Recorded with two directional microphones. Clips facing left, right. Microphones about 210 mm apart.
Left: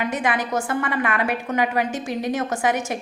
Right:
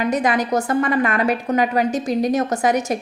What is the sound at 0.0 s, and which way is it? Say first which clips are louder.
A woman's voice: right 4 dB; 40° right (ahead or behind).